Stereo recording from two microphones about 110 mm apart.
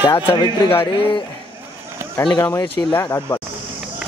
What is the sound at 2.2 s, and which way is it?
Speech, 30° left (ahead or behind).